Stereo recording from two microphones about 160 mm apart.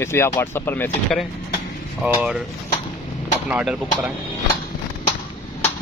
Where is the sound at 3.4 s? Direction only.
5° right (ahead or behind).